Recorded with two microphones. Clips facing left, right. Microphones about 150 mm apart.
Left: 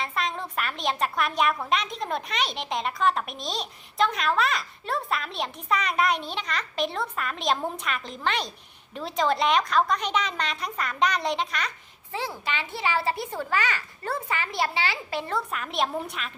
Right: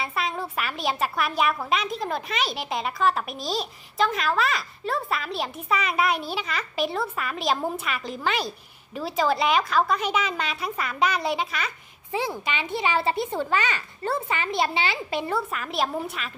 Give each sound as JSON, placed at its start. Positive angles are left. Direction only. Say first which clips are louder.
{"t": 0.0, "sound": "a woman's voice", "louder": "right 1 dB", "side_deg": -5}